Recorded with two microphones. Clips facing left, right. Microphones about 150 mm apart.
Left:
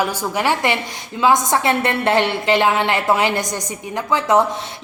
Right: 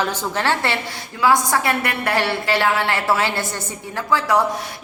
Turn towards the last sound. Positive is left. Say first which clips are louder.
# left 2 dB
turn(degrees=20)  # may be behind; listen again after turning